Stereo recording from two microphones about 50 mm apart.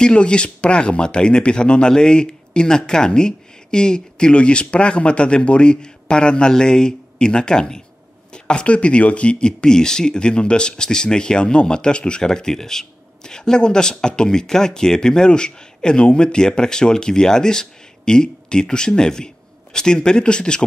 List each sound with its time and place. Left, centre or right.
0.0 s speech: centre